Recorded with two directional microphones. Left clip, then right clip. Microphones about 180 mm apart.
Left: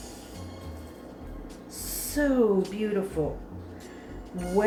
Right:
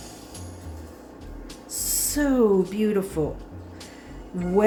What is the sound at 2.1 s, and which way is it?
Speech, 60° right (ahead or behind).